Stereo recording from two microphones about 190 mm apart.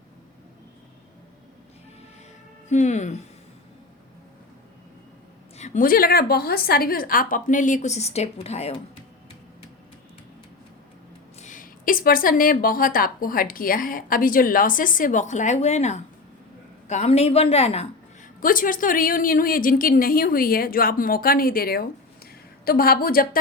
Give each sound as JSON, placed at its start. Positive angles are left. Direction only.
{"t": 2.6, "sound": "speech", "side_deg": 40}
{"t": 5.5, "sound": "a woman's voice", "side_deg": 40}
{"t": 11.3, "sound": "a woman's voice", "side_deg": 40}
{"t": 18.4, "sound": "a woman's voice", "side_deg": 45}